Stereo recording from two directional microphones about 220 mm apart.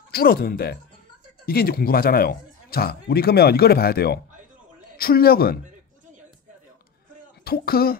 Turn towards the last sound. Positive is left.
turn(degrees=45)  # may be behind; listen again after turning